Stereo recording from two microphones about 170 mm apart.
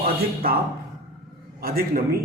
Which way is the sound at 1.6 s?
60° right (ahead or behind).